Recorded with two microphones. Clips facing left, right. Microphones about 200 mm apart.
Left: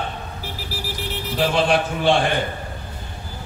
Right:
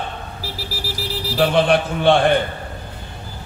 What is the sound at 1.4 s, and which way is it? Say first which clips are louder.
Speech: right 3 dB; 60° right (ahead or behind).